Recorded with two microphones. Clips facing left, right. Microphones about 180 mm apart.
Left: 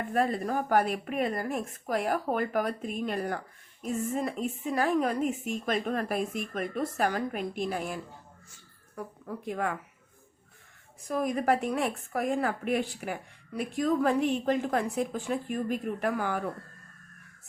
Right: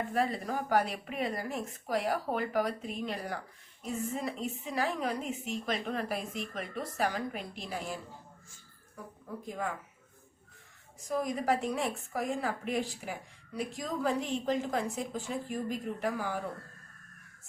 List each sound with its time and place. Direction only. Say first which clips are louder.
0.1 s a woman's voice: left 8 dB; 50° left (ahead or behind)
9.4 s speech: left 5 dB; 65° left (ahead or behind)
11.1 s a woman's voice: left 3 dB; 60° left (ahead or behind)